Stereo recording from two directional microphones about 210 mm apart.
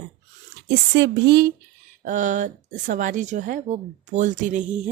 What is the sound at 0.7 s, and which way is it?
Speech, 55° right (ahead or behind).